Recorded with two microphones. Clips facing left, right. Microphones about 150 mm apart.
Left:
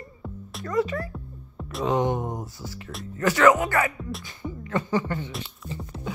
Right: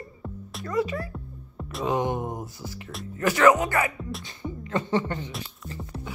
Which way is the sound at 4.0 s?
Centre (ahead or behind).